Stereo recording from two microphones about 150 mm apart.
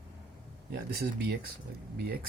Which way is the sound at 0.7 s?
90° right.